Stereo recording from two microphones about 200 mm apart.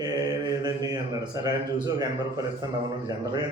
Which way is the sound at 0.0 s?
20° right (ahead or behind).